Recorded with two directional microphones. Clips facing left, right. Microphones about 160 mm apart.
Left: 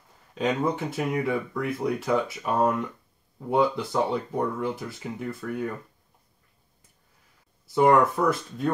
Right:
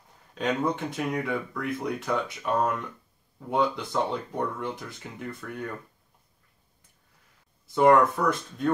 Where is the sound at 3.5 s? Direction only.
5° left (ahead or behind).